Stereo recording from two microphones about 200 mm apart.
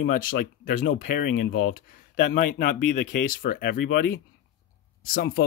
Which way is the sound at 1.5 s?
75° left (ahead or behind).